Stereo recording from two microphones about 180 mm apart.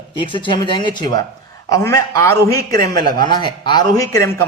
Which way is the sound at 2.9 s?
55° right (ahead or behind).